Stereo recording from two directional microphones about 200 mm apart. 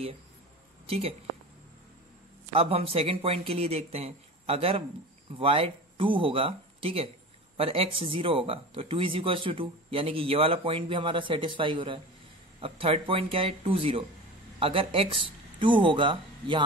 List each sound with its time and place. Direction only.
0.8 s speech: 30° right (ahead or behind)
2.5 s speech: 30° right (ahead or behind)